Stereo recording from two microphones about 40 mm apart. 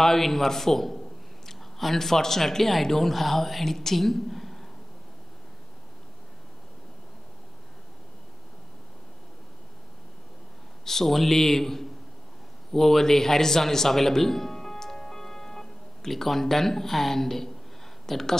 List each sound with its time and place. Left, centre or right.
0.0 s a man's voice: centre
10.9 s a man's voice: centre